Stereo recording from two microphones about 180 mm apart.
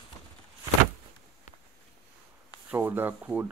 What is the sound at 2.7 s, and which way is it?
Speech, 10° right (ahead or behind).